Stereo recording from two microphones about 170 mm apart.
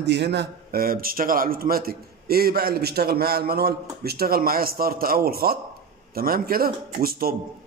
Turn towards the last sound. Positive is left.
turn(degrees=-60)  # may be behind; listen again after turning